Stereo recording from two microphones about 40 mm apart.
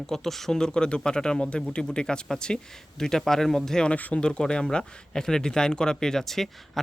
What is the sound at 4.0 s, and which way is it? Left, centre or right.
Speech, left.